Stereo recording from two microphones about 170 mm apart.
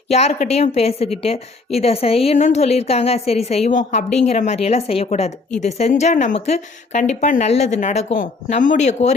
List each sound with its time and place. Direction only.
0.1 s a woman's voice: 40° left (ahead or behind)